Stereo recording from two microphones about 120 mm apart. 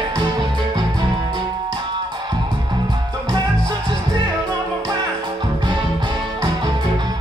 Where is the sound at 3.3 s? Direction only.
40° right (ahead or behind).